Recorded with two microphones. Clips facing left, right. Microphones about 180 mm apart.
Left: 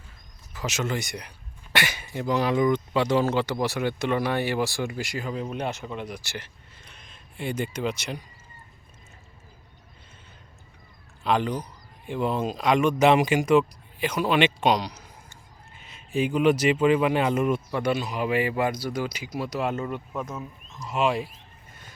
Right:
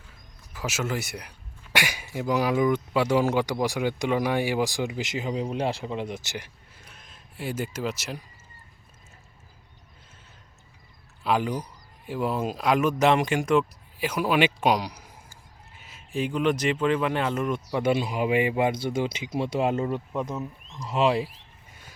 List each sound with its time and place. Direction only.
0.5 s speech: 10° right (ahead or behind)
11.2 s speech: 5° right (ahead or behind); by 17.6 s 10° left (ahead or behind)
17.7 s speech: 20° right (ahead or behind)
21.7 s a sound: 10° right (ahead or behind)